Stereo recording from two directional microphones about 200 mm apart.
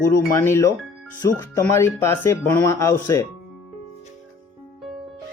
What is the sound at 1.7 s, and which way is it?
Speech, 15° left (ahead or behind).